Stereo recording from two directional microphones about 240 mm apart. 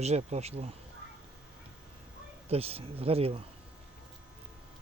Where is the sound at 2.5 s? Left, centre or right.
Right.